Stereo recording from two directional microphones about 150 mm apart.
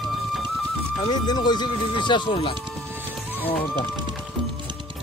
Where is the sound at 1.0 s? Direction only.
30° left (ahead or behind).